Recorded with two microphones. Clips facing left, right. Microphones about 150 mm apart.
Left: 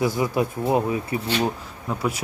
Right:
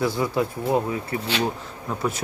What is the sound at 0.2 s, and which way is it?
Speech, 20° left (ahead or behind).